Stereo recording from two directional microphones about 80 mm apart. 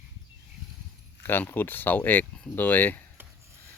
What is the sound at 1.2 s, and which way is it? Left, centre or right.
Speech, left.